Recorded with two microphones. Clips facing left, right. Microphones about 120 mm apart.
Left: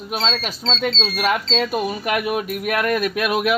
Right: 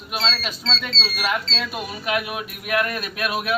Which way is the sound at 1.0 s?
55° left (ahead or behind).